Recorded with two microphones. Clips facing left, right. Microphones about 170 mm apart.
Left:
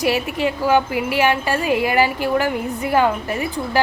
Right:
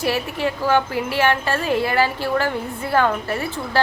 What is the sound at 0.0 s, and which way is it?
A woman's voice, 15° left (ahead or behind).